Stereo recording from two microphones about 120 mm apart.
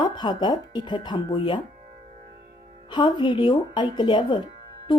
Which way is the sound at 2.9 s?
40° left (ahead or behind).